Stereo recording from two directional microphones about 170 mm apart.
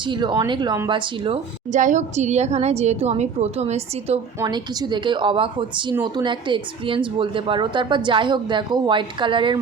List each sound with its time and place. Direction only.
0.0 s speech: 30° right (ahead or behind)
1.7 s a woman's voice: 45° right (ahead or behind)
4.4 s speech: 25° right (ahead or behind)